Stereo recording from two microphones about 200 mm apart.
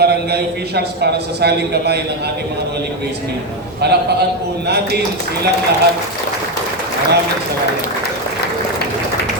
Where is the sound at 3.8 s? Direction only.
55° right (ahead or behind).